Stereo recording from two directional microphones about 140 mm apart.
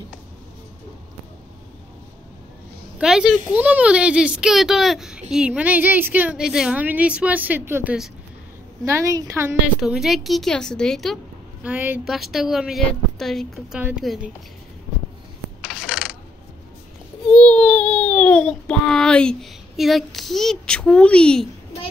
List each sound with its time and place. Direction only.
3.0 s a woman's voice: 5° right (ahead or behind)
9.8 s speech: 5° right (ahead or behind)
11.6 s a woman's voice: 10° right (ahead or behind)
12.1 s a woman's voice: centre (ahead or behind)
15.6 s coin: 5° right (ahead or behind)
17.3 s a child's voice: 10° left (ahead or behind)